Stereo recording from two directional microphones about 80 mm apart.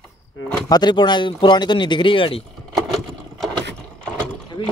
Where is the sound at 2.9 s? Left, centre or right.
Centre.